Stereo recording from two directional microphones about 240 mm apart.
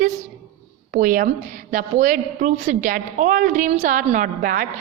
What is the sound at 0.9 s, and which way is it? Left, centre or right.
A woman's voice, right.